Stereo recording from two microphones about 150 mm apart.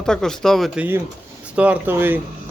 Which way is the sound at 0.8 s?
15° right (ahead or behind).